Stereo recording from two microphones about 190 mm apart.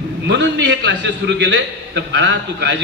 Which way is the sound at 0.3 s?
65° right (ahead or behind).